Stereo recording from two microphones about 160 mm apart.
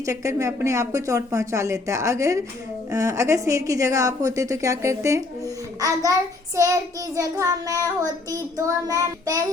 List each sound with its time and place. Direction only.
0.0 s a woman's voice: 20° right (ahead or behind)
7.2 s a woman's voice: 20° right (ahead or behind)